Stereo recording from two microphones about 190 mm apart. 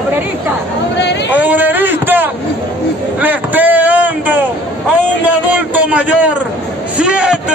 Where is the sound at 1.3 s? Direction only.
10° right (ahead or behind).